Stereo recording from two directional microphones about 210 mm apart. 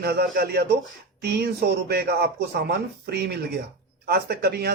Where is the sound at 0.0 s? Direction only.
45° right (ahead or behind).